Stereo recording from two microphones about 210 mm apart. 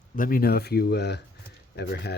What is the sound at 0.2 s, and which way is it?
Speech, 45° left (ahead or behind).